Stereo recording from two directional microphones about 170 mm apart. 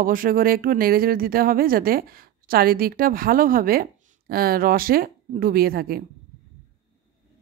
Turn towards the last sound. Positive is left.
turn(degrees=-60)  # may be behind; listen again after turning